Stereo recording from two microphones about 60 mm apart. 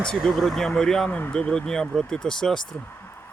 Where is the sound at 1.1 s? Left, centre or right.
Left.